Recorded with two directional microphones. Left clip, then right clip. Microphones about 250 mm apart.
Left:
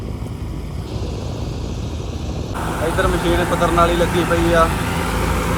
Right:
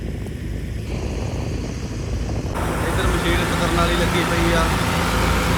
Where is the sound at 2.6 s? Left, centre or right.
Left.